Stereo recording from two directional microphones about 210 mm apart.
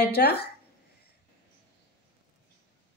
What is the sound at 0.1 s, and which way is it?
Speech, 50° left (ahead or behind).